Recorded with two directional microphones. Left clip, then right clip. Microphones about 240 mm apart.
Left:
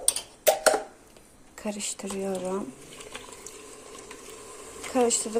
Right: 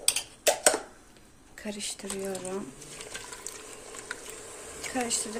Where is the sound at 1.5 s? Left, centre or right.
Centre.